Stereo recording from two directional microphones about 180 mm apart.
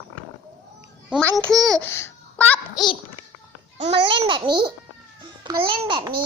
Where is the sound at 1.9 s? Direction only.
15° left (ahead or behind).